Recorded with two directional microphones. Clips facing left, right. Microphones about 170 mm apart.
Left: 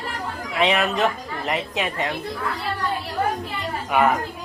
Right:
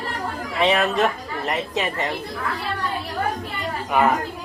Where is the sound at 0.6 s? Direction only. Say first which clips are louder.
Right 1 dB; 5° left (ahead or behind).